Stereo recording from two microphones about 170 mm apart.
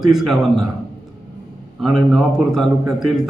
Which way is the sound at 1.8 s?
Centre (ahead or behind).